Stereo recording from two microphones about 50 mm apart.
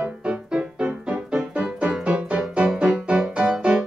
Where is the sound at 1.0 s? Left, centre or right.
Right.